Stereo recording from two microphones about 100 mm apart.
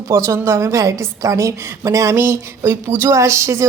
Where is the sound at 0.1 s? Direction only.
25° right (ahead or behind).